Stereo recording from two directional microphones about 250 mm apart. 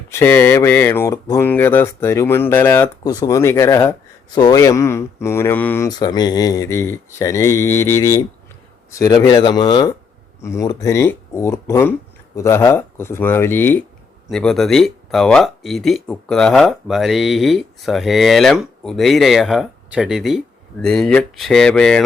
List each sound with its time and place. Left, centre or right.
0.1 s speech: centre